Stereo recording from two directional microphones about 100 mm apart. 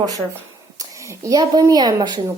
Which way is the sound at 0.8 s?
30° right (ahead or behind).